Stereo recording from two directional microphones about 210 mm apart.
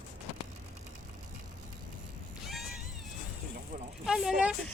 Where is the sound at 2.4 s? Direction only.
Centre (ahead or behind).